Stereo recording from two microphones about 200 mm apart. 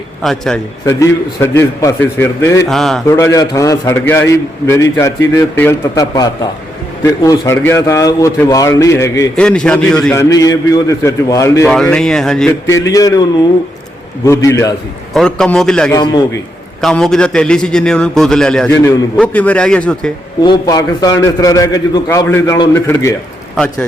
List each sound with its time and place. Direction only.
0.2 s a man's voice: centre (ahead or behind)
0.9 s a man's voice: 15° left (ahead or behind)
3.1 s a man's voice: 15° left (ahead or behind)
9.3 s a man's voice: 5° left (ahead or behind)
11.7 s a man's voice: 5° left (ahead or behind)
12.6 s a man's voice: 15° left (ahead or behind)
14.3 s a man's voice: 15° left (ahead or behind)
15.1 s a man's voice: 5° left (ahead or behind)
15.9 s a man's voice: 20° left (ahead or behind)
16.8 s a man's voice: 5° left (ahead or behind)
20.4 s a man's voice: 20° left (ahead or behind)